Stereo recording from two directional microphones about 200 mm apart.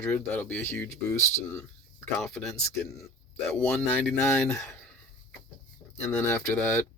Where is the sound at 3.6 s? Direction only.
5° left (ahead or behind).